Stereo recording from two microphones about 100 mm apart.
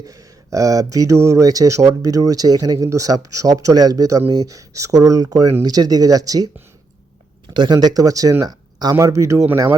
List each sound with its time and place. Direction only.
0.0 s speech: 35° right (ahead or behind)
7.5 s speech: 45° right (ahead or behind); by 9.5 s 30° right (ahead or behind)